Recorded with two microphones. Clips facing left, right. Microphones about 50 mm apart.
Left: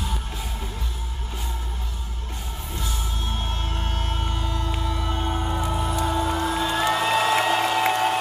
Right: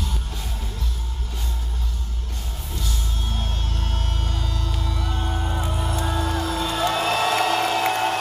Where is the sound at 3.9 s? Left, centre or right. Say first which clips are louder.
Left 2 dB; left.